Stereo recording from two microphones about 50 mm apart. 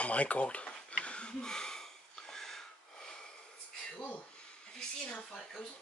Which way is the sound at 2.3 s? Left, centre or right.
Centre.